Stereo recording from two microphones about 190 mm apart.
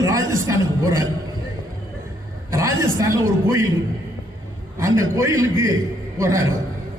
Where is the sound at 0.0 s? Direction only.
15° right (ahead or behind).